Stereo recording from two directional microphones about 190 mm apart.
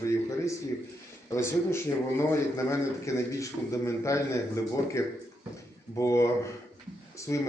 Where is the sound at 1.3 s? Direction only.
15° left (ahead or behind).